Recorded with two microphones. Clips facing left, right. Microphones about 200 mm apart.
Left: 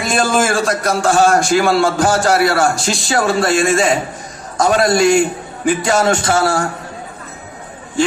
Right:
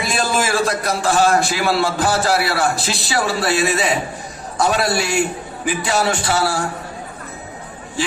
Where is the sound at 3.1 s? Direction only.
45° left (ahead or behind).